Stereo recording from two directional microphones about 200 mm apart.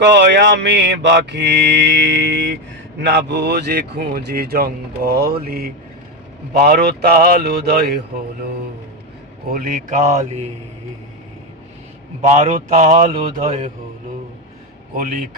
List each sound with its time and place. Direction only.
0.0 s mantra: 60° right (ahead or behind)
3.0 s a man's voice: 60° right (ahead or behind)
9.5 s a man's voice: 45° right (ahead or behind)
12.2 s a man's voice: 35° right (ahead or behind)
14.9 s a man's voice: 45° right (ahead or behind)